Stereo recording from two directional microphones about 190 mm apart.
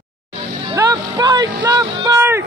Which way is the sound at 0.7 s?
15° right (ahead or behind).